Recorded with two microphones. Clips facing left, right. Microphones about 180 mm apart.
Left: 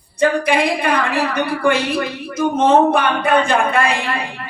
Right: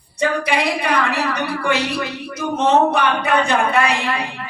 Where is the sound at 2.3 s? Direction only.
50° left (ahead or behind).